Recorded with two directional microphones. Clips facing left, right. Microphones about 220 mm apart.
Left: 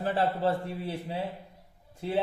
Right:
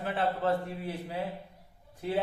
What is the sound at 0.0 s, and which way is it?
Speech, 35° left (ahead or behind).